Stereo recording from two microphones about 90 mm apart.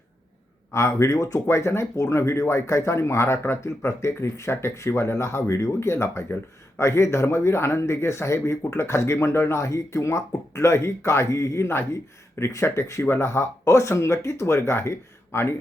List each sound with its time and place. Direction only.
0.7 s speech: 30° left (ahead or behind)